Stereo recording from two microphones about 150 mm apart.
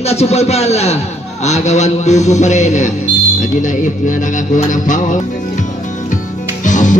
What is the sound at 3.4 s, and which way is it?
Speech, 55° left (ahead or behind).